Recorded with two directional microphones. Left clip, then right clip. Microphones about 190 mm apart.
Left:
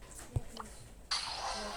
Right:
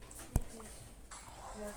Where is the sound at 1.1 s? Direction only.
50° left (ahead or behind).